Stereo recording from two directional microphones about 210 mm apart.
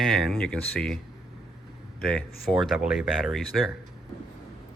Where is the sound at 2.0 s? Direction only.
5° left (ahead or behind).